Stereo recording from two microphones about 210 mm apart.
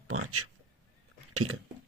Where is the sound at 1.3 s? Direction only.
85° right.